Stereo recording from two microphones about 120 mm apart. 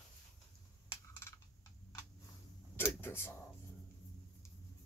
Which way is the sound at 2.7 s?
20° left (ahead or behind).